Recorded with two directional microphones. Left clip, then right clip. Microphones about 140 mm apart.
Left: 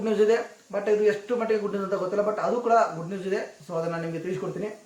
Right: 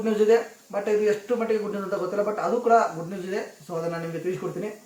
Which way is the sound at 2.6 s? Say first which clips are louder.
Right 2 dB; 20° left (ahead or behind).